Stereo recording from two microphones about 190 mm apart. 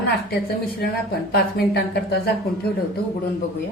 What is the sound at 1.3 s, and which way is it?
Speech, 55° left (ahead or behind).